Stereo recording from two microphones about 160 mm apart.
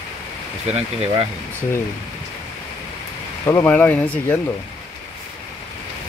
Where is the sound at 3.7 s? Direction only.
10° left (ahead or behind).